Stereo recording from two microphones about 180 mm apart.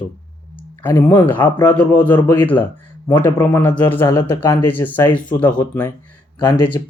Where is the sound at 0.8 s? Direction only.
10° left (ahead or behind).